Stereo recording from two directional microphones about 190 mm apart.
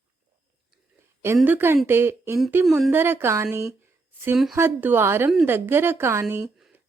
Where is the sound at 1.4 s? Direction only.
10° right (ahead or behind).